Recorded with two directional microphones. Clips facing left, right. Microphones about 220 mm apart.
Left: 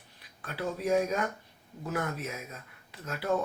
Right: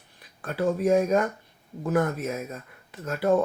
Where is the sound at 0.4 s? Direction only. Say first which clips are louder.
Right 8 dB; 50° right (ahead or behind).